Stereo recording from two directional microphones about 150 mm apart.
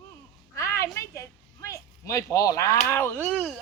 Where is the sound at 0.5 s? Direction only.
20° left (ahead or behind).